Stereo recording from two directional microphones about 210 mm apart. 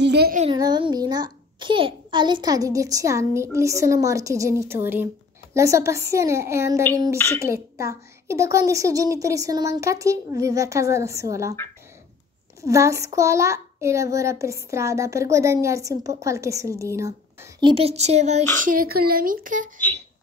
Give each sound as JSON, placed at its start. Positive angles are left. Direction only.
{"t": 0.0, "sound": "a sound", "side_deg": -50}
{"t": 0.4, "sound": "a child's voice", "side_deg": -20}
{"t": 12.6, "sound": "a child's voice", "side_deg": -15}